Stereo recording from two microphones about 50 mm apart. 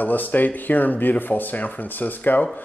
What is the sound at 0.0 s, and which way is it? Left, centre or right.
Speech, left.